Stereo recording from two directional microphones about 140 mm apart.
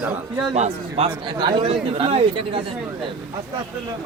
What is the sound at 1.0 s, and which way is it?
A man's voice, 45° right (ahead or behind).